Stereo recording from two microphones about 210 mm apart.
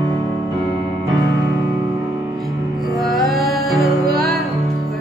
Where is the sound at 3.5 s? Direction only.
Centre (ahead or behind).